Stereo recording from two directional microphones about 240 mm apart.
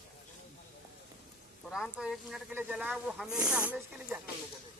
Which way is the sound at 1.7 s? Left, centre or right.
Centre.